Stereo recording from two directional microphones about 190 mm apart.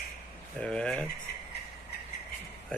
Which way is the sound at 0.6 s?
5° left (ahead or behind).